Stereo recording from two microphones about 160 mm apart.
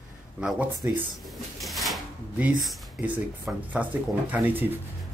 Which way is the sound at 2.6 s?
5° right (ahead or behind).